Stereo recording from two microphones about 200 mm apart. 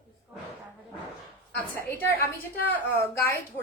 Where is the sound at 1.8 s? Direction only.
10° left (ahead or behind).